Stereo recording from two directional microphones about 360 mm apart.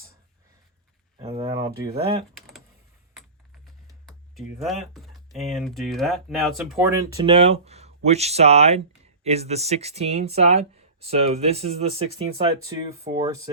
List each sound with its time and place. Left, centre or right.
1.3 s speech: centre
3.2 s speech: centre
13.1 s speech: centre